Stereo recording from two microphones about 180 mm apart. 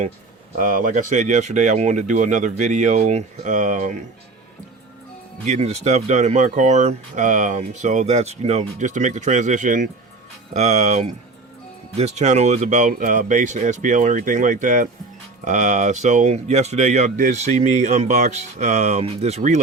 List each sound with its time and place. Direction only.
0.5 s speech: 50° right (ahead or behind)
5.5 s speech: 35° right (ahead or behind)